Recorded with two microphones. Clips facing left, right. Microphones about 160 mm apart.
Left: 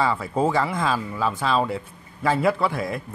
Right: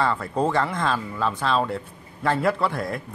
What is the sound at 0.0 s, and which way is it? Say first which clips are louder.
A man's voice: left 1 dB; 5° left (ahead or behind).